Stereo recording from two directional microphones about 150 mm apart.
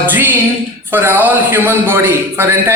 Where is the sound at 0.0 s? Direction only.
15° right (ahead or behind).